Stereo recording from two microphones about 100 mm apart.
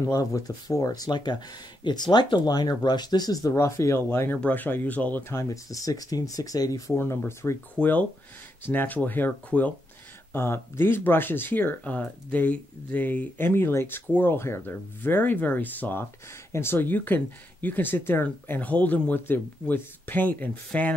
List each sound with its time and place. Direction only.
0.1 s speech: 35° left (ahead or behind); by 5.2 s 15° left (ahead or behind)
5.3 s speech: 30° left (ahead or behind)
6.9 s speech: 25° left (ahead or behind)